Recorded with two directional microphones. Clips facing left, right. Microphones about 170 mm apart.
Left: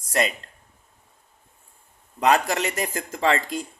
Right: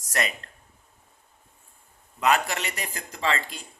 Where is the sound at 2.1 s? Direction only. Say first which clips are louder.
Left 4 dB; 35° left (ahead or behind).